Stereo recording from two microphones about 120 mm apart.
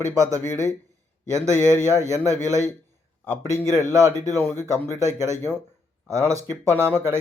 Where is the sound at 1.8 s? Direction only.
25° right (ahead or behind).